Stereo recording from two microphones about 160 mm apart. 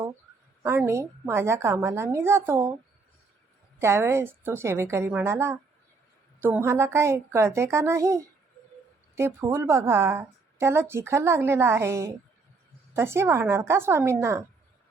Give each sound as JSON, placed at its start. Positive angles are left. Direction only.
{"t": 0.6, "sound": "a woman's voice", "side_deg": -15}
{"t": 3.8, "sound": "a woman's voice", "side_deg": -15}